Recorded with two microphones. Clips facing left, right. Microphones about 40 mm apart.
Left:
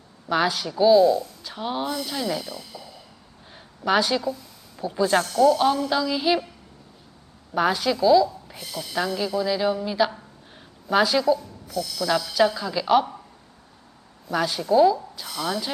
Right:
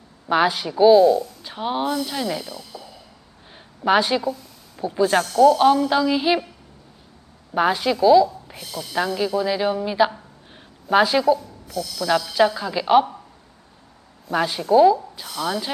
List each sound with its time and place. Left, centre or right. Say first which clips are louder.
0.3 s speech: right 4 dB; centre
3.5 s a sound: right 4 dB; centre
4.9 s speech: right 3 dB; centre
5.5 s speech: right 5 dB; centre
7.5 s a woman's voice: right 2 dB; centre
14.3 s speech: right 3 dB; centre